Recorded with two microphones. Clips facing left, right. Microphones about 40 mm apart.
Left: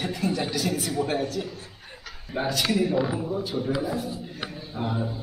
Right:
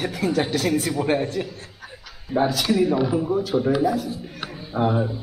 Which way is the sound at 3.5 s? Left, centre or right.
Right.